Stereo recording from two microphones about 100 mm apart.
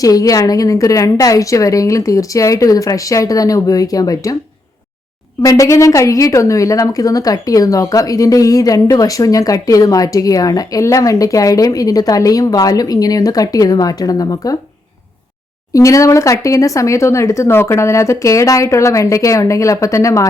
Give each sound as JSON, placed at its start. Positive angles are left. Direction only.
{"t": 0.0, "sound": "a woman's voice", "side_deg": 35}
{"t": 5.4, "sound": "a woman's voice", "side_deg": 35}
{"t": 15.7, "sound": "a woman's voice", "side_deg": 35}